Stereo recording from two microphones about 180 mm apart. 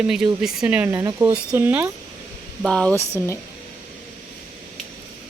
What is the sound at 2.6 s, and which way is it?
Speech, 5° left (ahead or behind).